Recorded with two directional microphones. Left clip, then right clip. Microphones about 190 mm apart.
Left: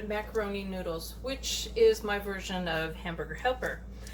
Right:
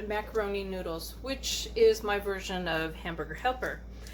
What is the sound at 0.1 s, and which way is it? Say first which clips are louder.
Speech: right 1 dB; 45° right (ahead or behind).